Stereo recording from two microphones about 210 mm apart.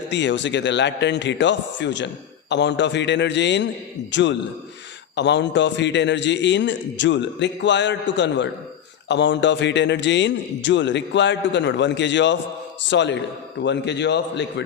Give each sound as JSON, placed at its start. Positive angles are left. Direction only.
{"t": 0.1, "sound": "a man's voice", "side_deg": 55}